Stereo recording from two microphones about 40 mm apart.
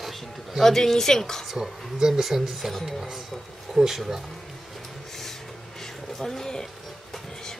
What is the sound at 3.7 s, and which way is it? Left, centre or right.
Speech, centre.